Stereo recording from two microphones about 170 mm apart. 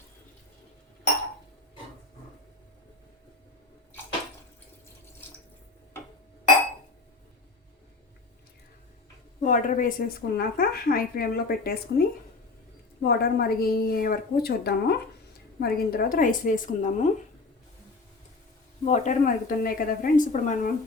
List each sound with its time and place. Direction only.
9.4 s a woman's voice: 50° left (ahead or behind)
18.9 s a woman's voice: 45° left (ahead or behind)